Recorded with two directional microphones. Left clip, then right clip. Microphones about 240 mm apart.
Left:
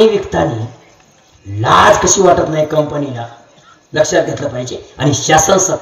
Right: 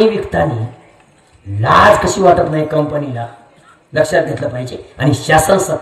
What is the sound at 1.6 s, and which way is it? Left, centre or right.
A man's voice, left.